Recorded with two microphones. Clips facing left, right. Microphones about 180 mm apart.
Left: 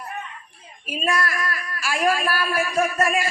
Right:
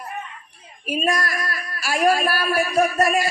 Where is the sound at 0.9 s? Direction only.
40° right (ahead or behind).